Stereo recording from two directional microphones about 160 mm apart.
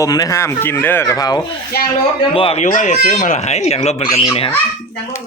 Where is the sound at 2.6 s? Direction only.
50° left (ahead or behind).